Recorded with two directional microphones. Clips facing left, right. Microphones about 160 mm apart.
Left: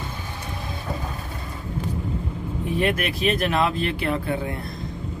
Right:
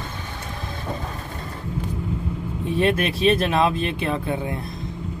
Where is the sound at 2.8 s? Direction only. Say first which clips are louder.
Right 4 dB; 25° right (ahead or behind).